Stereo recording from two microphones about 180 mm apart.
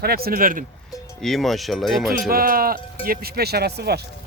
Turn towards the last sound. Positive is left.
turn(degrees=-65)  # may be behind; listen again after turning